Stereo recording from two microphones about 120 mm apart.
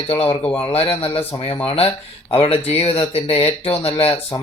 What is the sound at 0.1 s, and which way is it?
Speech, 50° left (ahead or behind).